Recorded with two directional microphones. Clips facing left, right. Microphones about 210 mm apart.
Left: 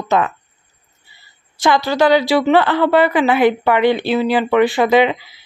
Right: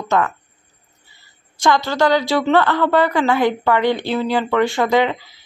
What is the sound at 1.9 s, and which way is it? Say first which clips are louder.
A woman's voice: left 3 dB; 15° left (ahead or behind).